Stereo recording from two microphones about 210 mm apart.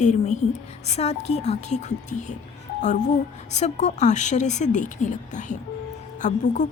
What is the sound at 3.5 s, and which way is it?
A woman's voice, 35° left (ahead or behind).